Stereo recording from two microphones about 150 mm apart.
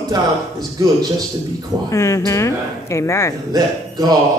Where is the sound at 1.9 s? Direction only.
20° left (ahead or behind).